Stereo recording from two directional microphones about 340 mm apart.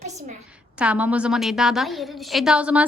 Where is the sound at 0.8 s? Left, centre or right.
Centre.